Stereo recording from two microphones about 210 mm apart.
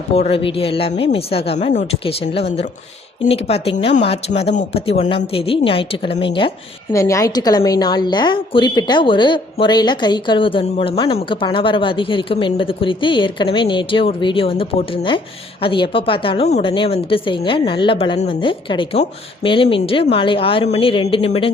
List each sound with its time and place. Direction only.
0.1 s a woman's voice: 30° left (ahead or behind)